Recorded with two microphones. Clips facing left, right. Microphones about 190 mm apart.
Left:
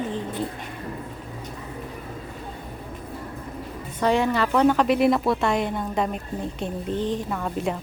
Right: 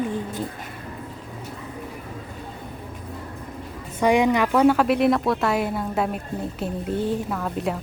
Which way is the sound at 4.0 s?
15° right (ahead or behind).